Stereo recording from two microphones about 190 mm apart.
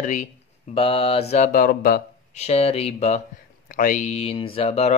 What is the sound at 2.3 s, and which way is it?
Speech, 35° left (ahead or behind).